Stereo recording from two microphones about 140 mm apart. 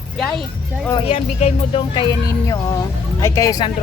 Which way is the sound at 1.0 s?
50° left (ahead or behind).